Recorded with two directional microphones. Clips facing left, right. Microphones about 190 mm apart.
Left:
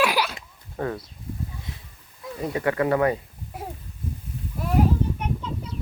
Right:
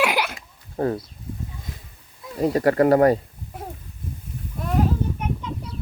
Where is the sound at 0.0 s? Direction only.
20° right (ahead or behind).